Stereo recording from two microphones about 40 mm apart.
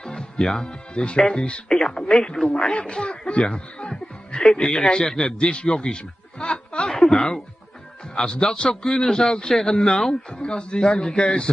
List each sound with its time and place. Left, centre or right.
0.0 s music: centre
0.7 s a man's voice: left
5.5 s snicker: left
8.2 s a man's voice: centre
10.3 s a man's voice: left